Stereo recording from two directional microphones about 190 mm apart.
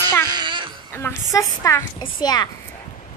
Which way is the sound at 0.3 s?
25° right (ahead or behind).